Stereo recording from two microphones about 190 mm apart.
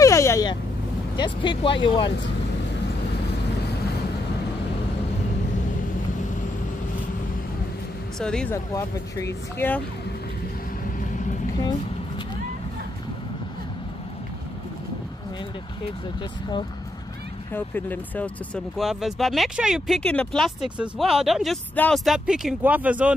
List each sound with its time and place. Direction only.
0.0 s vehicle: 15° left (ahead or behind)
1.1 s speech: 25° left (ahead or behind)
8.2 s speech: 5° left (ahead or behind)
8.7 s speech: 15° left (ahead or behind)
11.0 s vehicle: 40° left (ahead or behind)
17.5 s speech: 10° left (ahead or behind); by 23.1 s 5° right (ahead or behind)